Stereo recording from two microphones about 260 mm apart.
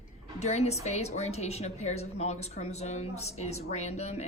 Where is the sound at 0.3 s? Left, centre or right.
Left.